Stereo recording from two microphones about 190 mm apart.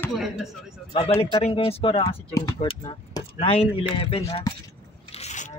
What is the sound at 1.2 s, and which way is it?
Speech, 30° left (ahead or behind).